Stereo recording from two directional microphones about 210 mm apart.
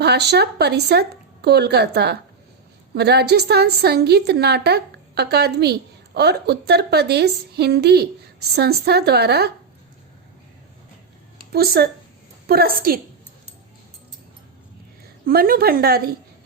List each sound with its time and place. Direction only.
0.0 s a woman's voice: 50° right (ahead or behind)
11.5 s a woman's voice: 50° right (ahead or behind)
15.2 s a woman's voice: 45° right (ahead or behind)